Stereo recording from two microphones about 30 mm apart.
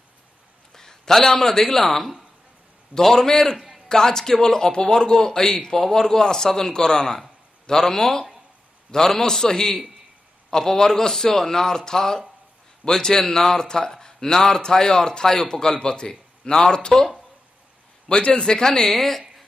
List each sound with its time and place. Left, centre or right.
0.7 s a sound: centre
1.1 s a man's voice: centre
3.2 s a man's voice: centre
3.5 s a sound: centre
3.9 s a man's voice: centre
18.3 s a man's voice: left
18.7 s a man's voice: centre